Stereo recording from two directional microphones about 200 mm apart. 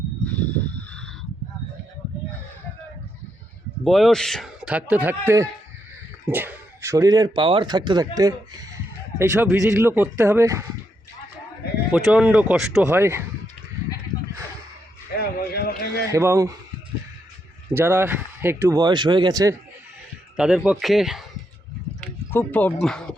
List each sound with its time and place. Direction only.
0.3 s a sound: 5° left (ahead or behind)
3.8 s speech: centre (ahead or behind)
11.9 s speech: 5° right (ahead or behind)
15.2 s a sound: 50° left (ahead or behind)
16.0 s speech: 15° right (ahead or behind)
17.7 s speech: 10° right (ahead or behind)
20.3 s a man's voice: 5° right (ahead or behind)
22.0 s speech: 10° left (ahead or behind)